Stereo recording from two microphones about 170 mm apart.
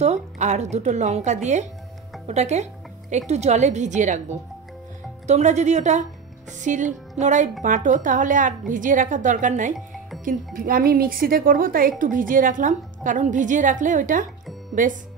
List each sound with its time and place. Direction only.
0.0 s a woman's voice: 40° right (ahead or behind)